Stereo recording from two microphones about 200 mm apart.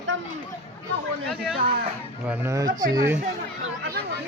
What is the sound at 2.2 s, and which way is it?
Speech, 15° right (ahead or behind).